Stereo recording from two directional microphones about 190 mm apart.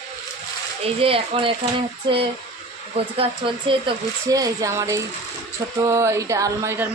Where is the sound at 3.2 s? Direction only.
25° right (ahead or behind).